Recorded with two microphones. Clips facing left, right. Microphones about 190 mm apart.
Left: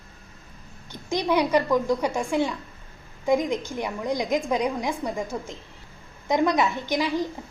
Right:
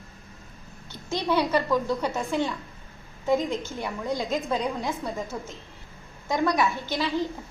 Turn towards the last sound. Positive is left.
turn(degrees=15)  # may be behind; listen again after turning